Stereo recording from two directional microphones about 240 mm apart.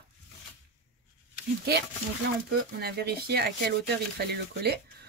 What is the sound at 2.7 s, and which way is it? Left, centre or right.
Speech, right.